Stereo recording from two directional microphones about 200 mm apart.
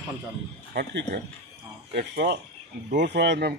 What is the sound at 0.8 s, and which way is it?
Speech, 55° right (ahead or behind).